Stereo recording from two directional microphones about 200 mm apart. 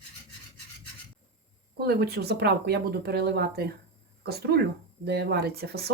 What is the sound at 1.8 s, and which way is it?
Speech, 55° right (ahead or behind).